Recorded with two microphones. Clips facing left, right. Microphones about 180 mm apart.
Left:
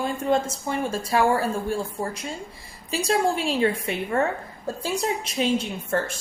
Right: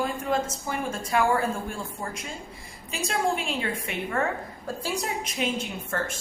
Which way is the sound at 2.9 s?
35° left (ahead or behind).